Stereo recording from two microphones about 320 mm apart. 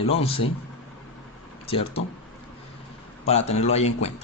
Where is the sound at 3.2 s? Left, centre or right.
Centre.